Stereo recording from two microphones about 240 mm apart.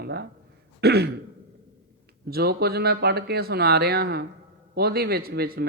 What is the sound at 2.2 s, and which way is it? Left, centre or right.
Speech, right.